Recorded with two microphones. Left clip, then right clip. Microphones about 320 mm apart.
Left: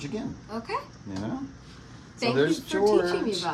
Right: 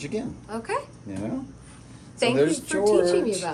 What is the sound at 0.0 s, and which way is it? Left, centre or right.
Speech, centre.